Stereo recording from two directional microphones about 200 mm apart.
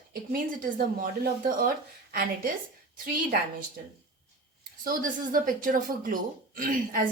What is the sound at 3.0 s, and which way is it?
Speech, 45° right (ahead or behind).